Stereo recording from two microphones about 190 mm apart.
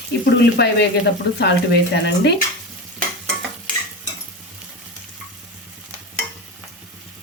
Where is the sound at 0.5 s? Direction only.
60° left (ahead or behind).